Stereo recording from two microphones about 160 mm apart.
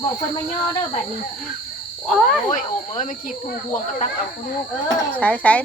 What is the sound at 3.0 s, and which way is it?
Speech, 55° left (ahead or behind).